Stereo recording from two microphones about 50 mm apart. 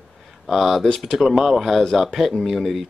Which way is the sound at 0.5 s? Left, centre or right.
Centre.